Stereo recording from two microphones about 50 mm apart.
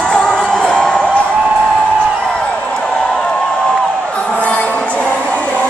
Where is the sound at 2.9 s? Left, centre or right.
Centre.